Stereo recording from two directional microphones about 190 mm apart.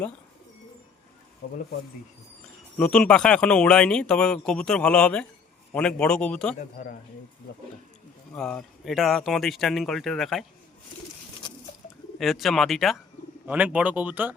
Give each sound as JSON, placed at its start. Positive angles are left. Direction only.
{"t": 2.7, "sound": "speech", "side_deg": 5}
{"t": 6.6, "sound": "speech", "side_deg": 45}
{"t": 8.4, "sound": "speech", "side_deg": 5}
{"t": 11.4, "sound": "patter", "side_deg": 25}
{"t": 12.2, "sound": "speech", "side_deg": 0}